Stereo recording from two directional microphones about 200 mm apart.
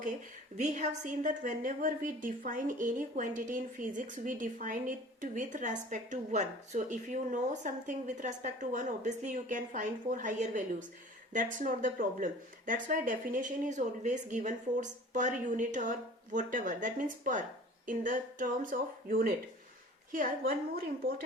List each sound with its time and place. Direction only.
0.5 s a woman's voice: 35° right (ahead or behind)